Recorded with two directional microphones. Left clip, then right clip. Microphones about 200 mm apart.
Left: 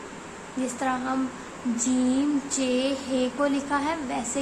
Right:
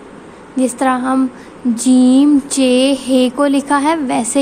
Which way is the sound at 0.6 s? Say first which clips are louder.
Right 13 dB; 45° right (ahead or behind).